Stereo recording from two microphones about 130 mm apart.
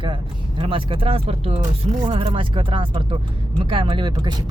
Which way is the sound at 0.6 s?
40° right (ahead or behind).